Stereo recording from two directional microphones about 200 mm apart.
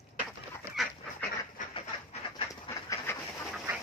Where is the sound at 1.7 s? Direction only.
25° left (ahead or behind).